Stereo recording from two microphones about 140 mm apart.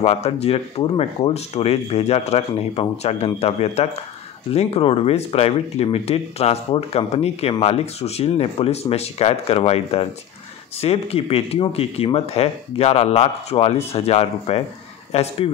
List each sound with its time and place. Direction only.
0.0 s speech: 45° left (ahead or behind)